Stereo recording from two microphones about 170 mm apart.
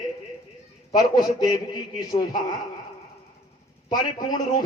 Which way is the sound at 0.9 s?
25° left (ahead or behind).